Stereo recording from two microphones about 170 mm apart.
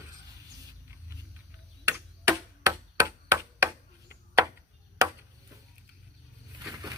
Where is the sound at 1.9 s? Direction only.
15° right (ahead or behind).